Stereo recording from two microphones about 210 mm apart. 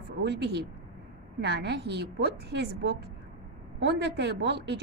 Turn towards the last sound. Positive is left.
turn(degrees=-55)  # may be behind; listen again after turning